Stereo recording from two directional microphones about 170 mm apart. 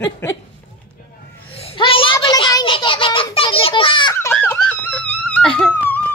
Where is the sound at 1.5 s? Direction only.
35° left (ahead or behind).